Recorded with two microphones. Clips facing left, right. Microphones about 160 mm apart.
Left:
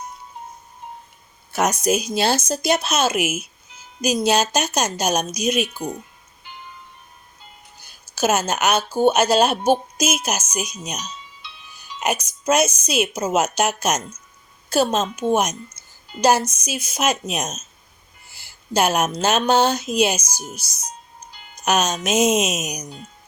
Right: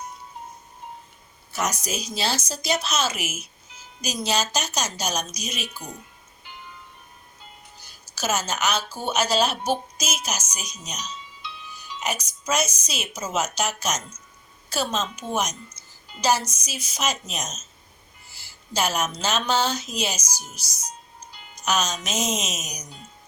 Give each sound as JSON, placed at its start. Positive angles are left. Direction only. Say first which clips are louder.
{"t": 1.5, "sound": "speech", "louder": "left 8 dB", "side_deg": 55}
{"t": 8.1, "sound": "speech", "louder": "left 7 dB", "side_deg": 55}